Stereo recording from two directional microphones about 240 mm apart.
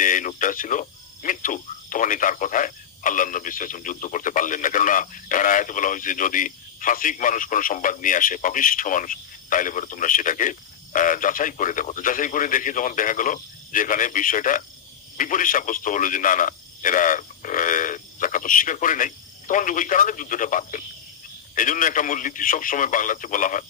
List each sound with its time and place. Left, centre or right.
0.0 s speech: left